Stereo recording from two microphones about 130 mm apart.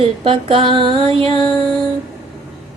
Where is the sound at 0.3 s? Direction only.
45° right (ahead or behind).